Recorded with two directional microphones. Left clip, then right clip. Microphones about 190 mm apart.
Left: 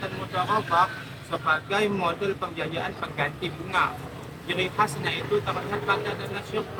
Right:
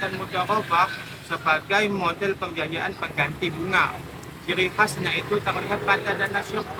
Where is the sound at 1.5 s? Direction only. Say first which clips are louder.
Right 3 dB; 15° right (ahead or behind).